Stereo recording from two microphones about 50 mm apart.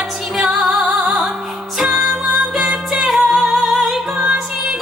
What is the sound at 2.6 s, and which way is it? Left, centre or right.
Music, centre.